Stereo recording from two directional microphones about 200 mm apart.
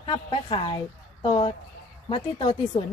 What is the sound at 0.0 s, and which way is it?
A woman's voice, 25° left (ahead or behind).